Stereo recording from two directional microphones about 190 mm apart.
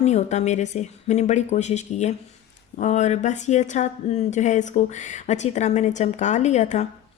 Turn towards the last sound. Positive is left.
turn(degrees=35)  # may be behind; listen again after turning